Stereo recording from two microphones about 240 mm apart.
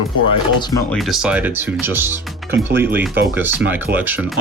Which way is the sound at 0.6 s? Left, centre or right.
Centre.